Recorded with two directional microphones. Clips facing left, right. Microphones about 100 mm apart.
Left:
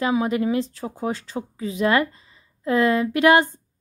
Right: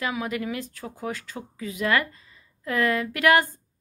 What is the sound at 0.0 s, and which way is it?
A woman's voice, 30° left (ahead or behind).